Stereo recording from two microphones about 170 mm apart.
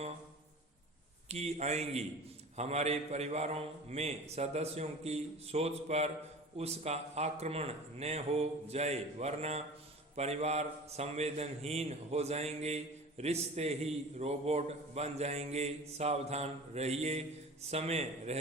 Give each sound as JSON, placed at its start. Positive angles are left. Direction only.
{"t": 1.3, "sound": "a man's voice", "side_deg": -40}